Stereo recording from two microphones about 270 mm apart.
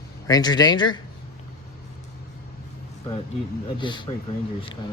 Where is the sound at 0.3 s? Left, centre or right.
Centre.